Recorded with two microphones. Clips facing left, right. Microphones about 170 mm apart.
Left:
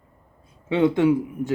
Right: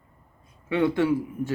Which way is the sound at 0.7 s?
20° left (ahead or behind).